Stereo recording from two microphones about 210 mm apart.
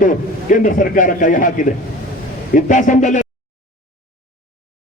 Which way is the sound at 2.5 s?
35° left (ahead or behind).